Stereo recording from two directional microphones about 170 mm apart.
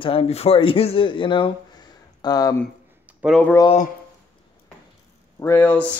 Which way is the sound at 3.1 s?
10° right (ahead or behind).